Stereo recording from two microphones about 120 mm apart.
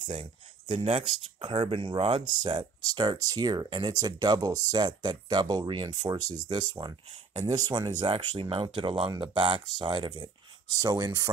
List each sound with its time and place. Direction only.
0.0 s speech: 50° right (ahead or behind); by 7.9 s 35° right (ahead or behind)
8.0 s speech: 45° right (ahead or behind)
10.8 s speech: 30° right (ahead or behind)